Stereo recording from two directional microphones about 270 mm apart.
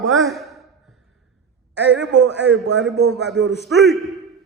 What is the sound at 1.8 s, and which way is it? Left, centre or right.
A man's voice, right.